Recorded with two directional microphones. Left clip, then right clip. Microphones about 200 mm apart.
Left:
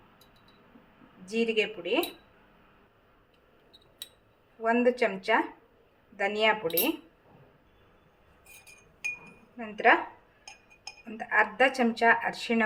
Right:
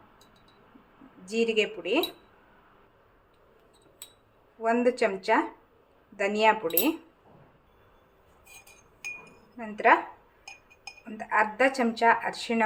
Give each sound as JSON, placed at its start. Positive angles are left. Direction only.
{"t": 1.3, "sound": "speech", "side_deg": -15}
{"t": 4.6, "sound": "speech", "side_deg": -15}
{"t": 9.6, "sound": "speech", "side_deg": -5}
{"t": 11.2, "sound": "speech", "side_deg": 0}